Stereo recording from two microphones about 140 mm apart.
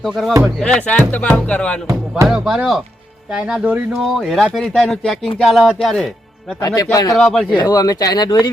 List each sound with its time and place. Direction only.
0.0 s speech: centre (ahead or behind)
2.2 s speech: 5° right (ahead or behind)
6.6 s speech: 25° left (ahead or behind)
7.2 s speech: 5° left (ahead or behind)
7.5 s speech: 30° left (ahead or behind)